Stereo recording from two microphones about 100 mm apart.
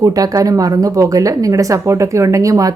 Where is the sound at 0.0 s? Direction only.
35° right (ahead or behind).